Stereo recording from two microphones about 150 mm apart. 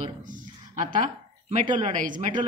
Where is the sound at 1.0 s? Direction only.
55° right (ahead or behind).